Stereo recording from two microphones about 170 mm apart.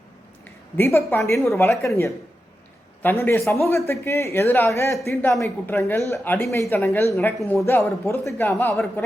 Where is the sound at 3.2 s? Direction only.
15° left (ahead or behind).